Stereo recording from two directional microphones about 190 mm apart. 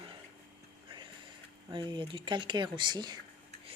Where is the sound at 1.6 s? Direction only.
25° right (ahead or behind).